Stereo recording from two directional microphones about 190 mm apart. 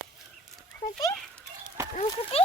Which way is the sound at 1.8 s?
15° right (ahead or behind).